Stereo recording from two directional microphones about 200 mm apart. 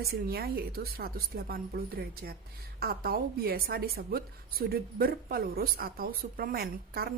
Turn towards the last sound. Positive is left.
turn(degrees=-50)  # may be behind; listen again after turning